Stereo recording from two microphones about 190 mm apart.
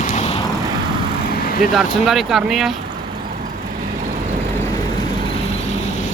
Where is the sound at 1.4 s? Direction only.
50° left (ahead or behind).